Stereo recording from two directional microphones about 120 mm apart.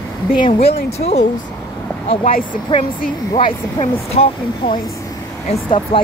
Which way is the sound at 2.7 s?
45° left (ahead or behind).